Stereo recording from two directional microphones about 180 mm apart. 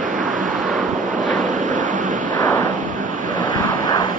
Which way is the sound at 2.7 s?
45° right (ahead or behind).